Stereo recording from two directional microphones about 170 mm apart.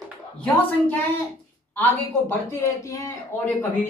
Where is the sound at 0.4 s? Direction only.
10° left (ahead or behind).